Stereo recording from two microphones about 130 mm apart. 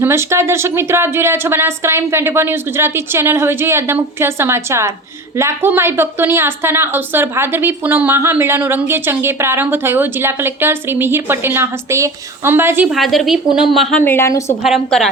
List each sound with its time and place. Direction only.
0.0 s a woman's voice: 20° right (ahead or behind)
12.9 s a woman's voice: centre (ahead or behind)
14.0 s a woman's voice: 15° left (ahead or behind)
14.6 s a woman's voice: centre (ahead or behind)